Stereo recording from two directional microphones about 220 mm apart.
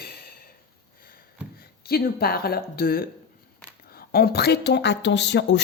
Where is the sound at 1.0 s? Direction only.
40° left (ahead or behind).